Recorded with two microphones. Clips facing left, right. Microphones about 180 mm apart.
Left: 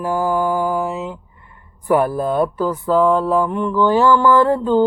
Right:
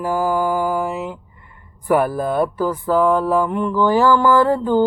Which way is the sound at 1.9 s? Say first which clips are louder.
Left 1 dB; 10° right (ahead or behind).